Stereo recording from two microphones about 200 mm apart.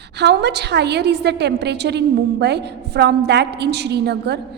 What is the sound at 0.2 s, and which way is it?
A woman's voice, 55° right (ahead or behind).